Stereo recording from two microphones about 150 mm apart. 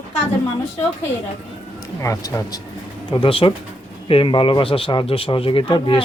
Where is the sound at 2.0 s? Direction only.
20° left (ahead or behind).